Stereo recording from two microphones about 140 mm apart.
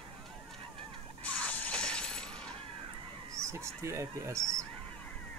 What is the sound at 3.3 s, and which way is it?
Speech, 20° right (ahead or behind).